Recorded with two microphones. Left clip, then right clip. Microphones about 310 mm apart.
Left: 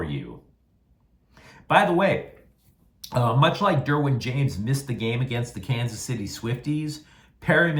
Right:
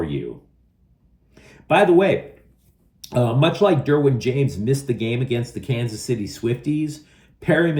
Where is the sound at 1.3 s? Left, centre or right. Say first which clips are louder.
Right 3 dB; left.